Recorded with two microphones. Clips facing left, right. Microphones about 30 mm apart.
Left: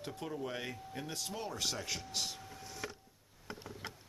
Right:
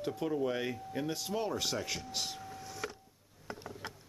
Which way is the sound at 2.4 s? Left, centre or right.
Centre.